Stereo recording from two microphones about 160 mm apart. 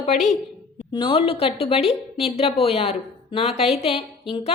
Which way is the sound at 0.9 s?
30° left (ahead or behind).